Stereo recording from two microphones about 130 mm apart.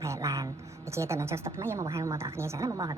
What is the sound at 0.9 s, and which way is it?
A woman's voice, 20° right (ahead or behind).